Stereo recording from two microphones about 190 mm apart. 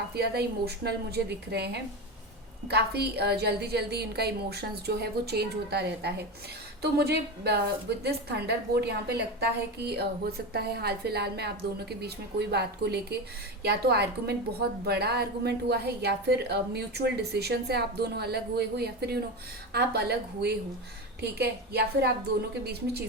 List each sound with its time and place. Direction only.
0.1 s a woman's voice: 60° right (ahead or behind)